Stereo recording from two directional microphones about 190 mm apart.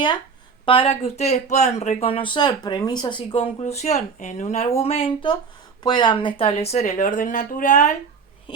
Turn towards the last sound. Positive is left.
turn(degrees=40)  # may be behind; listen again after turning